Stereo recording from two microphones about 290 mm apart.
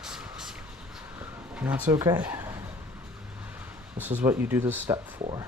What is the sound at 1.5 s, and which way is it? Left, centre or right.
Speech, centre.